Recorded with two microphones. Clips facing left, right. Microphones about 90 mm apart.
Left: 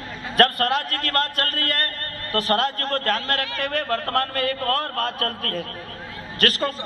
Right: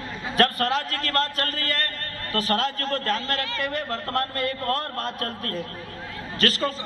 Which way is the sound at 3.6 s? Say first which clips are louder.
Left 4 dB; 85° left.